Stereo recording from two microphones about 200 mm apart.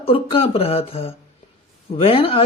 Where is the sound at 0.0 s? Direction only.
30° left (ahead or behind).